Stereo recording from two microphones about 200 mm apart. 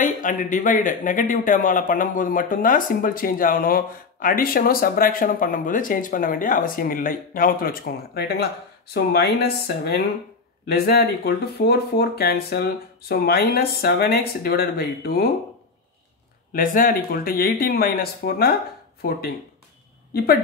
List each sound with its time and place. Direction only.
0.0 s a man's voice: 40° left (ahead or behind)
16.5 s a man's voice: 45° left (ahead or behind)